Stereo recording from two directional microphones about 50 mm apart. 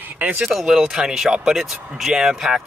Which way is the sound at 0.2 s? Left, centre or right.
Right.